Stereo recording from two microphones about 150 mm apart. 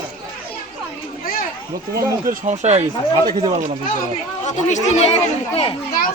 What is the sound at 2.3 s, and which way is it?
Speech, 50° right (ahead or behind).